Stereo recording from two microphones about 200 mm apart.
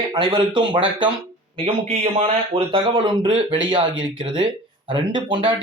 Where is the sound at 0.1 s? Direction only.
25° right (ahead or behind).